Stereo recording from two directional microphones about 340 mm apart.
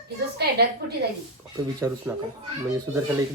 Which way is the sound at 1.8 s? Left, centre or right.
Centre.